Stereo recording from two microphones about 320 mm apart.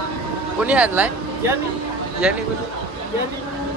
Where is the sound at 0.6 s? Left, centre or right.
Centre.